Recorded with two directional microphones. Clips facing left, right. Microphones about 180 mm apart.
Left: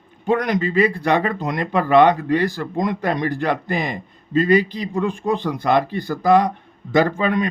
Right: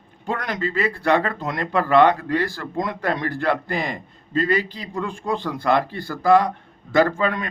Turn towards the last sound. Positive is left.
turn(degrees=20)  # may be behind; listen again after turning